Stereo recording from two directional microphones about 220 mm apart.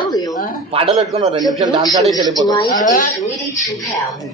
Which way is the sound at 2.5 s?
20° left (ahead or behind).